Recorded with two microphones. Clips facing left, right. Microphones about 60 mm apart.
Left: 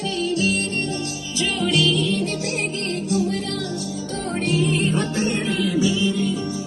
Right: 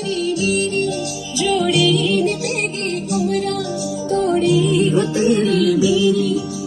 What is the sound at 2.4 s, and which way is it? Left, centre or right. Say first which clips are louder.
Music: right 3 dB; right.